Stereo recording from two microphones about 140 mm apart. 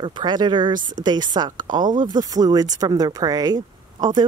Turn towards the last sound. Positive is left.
turn(degrees=-30)  # may be behind; listen again after turning